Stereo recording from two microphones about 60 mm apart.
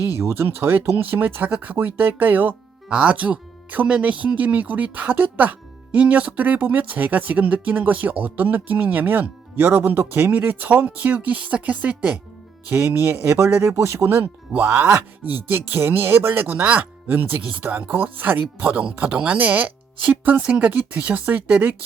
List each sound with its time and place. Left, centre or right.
0.2 s speech: right
0.4 s speech: right
12.7 s speech: right
14.7 s speech: right
15.2 s speech: right